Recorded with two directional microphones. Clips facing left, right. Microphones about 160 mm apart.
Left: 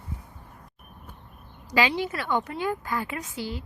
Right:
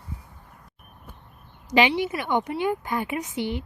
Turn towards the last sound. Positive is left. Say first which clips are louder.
# right 5 dB
turn(degrees=-20)  # may be behind; listen again after turning